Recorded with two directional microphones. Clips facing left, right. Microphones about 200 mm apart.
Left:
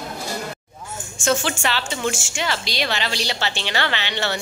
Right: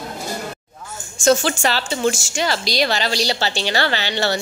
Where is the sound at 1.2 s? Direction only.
40° right (ahead or behind).